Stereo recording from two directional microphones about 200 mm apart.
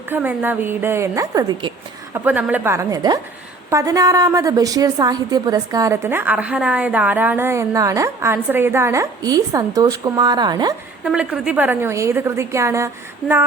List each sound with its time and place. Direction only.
0.1 s a woman's voice: 10° right (ahead or behind)
2.1 s a woman's voice: 10° right (ahead or behind)
11.0 s a woman's voice: 5° right (ahead or behind)